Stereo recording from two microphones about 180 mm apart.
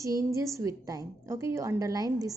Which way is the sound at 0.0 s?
15° right (ahead or behind).